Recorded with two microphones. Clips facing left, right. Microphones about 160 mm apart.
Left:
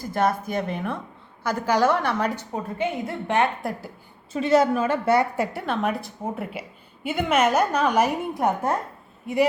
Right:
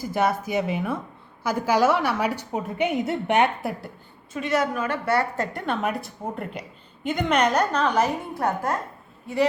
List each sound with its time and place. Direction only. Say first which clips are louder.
0.0 s a woman's voice: even; 10° right (ahead or behind)
3.6 s a woman's voice: even; centre (ahead or behind)
4.3 s a woman's voice: left 5 dB; 30° left (ahead or behind)
5.4 s a woman's voice: left 1 dB; 5° left (ahead or behind)